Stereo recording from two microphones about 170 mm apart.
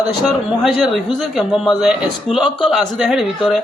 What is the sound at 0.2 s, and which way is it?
A man's voice, centre (ahead or behind).